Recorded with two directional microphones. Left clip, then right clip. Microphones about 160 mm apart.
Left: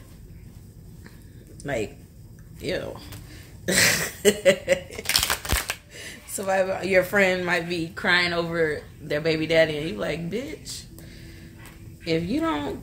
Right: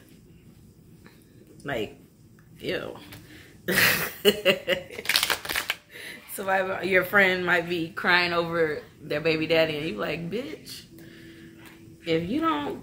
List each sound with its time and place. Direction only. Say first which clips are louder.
1.6 s a woman's voice: left 2 dB; 10° left (ahead or behind)
5.0 s a sound: even; 60° left (ahead or behind)
5.9 s a woman's voice: left 2 dB; 15° left (ahead or behind)
12.0 s a woman's voice: even; 10° left (ahead or behind)